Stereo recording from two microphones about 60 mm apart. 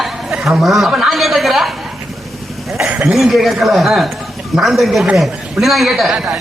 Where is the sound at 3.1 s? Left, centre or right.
Centre.